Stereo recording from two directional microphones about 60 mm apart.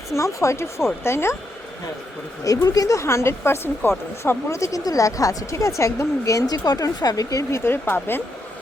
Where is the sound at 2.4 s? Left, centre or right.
Left.